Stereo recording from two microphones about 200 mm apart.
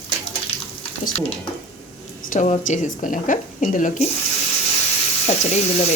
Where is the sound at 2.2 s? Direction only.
40° left (ahead or behind).